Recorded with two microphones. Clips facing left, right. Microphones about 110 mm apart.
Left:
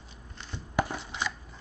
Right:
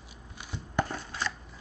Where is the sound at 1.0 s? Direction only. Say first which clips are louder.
Left 1 dB; 15° left (ahead or behind).